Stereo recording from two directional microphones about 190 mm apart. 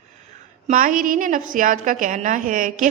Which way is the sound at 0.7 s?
45° right (ahead or behind).